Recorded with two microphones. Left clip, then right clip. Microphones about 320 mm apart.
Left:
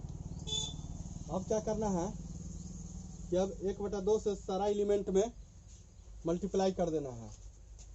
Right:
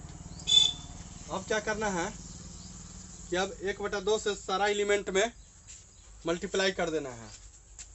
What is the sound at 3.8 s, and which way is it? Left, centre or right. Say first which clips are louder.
Speech: right 3 dB; right.